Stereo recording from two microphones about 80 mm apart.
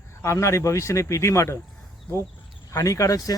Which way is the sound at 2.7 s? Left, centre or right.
Left.